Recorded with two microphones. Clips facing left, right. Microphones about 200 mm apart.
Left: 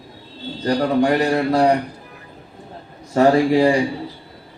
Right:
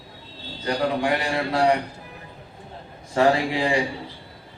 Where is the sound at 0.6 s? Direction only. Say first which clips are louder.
Left 6 dB; 45° left (ahead or behind).